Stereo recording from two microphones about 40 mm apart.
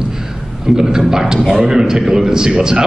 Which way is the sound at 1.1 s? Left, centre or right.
Centre.